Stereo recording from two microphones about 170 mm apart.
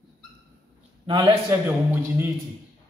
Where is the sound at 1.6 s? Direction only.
10° right (ahead or behind).